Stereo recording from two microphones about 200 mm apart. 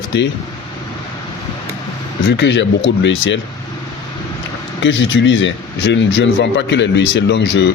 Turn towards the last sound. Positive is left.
turn(degrees=60)  # may be behind; listen again after turning